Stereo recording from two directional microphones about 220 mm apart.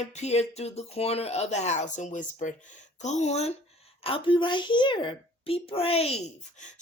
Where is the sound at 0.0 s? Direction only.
30° left (ahead or behind).